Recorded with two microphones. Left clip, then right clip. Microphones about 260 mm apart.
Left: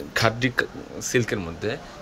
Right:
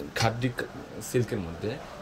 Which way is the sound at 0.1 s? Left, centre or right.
Centre.